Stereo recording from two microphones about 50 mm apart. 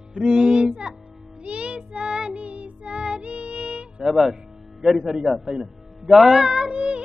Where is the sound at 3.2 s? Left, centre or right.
Right.